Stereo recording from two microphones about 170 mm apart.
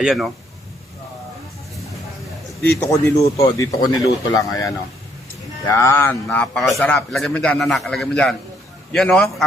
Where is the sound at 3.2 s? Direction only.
20° left (ahead or behind).